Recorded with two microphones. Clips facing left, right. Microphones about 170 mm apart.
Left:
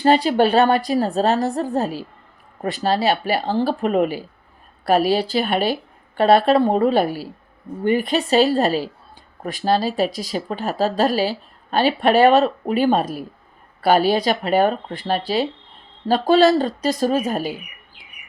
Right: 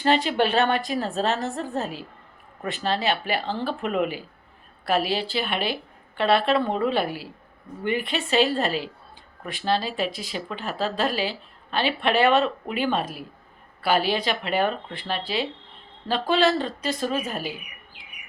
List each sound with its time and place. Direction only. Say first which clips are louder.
0.0 s speech: left 6 dB; 40° left (ahead or behind)